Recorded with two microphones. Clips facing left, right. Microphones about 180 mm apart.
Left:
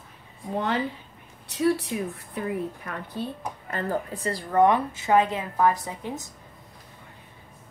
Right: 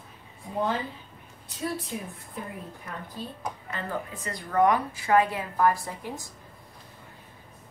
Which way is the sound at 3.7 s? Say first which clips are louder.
Left 7 dB; 35° left (ahead or behind).